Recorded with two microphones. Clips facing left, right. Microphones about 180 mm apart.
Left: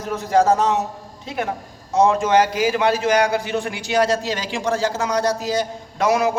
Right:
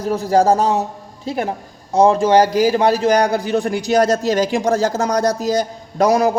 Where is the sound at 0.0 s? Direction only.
35° right (ahead or behind).